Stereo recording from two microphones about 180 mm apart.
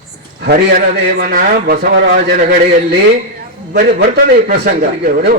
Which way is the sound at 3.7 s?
60° right (ahead or behind).